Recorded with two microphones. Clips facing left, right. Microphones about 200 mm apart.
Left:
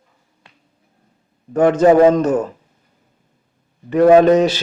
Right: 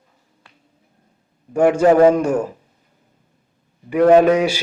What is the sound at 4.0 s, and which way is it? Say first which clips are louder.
Speech: left 2 dB; 10° left (ahead or behind).